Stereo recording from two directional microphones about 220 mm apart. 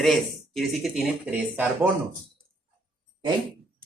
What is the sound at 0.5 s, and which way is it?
Speech, centre (ahead or behind).